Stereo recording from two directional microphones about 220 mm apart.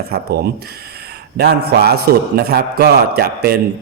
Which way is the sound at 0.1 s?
45° right (ahead or behind).